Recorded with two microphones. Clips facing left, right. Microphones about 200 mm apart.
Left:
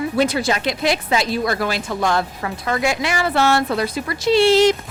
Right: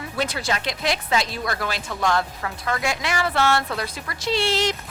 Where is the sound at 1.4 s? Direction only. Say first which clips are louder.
Left 6 dB; 25° left (ahead or behind).